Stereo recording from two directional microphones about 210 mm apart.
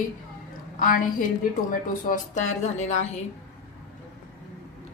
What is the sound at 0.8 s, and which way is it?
Speech, 40° left (ahead or behind).